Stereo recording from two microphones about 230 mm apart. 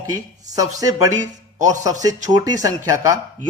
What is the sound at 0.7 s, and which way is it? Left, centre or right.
Speech, centre.